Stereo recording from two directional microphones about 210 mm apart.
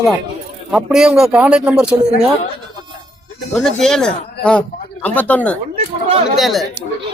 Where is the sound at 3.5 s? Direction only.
Centre (ahead or behind).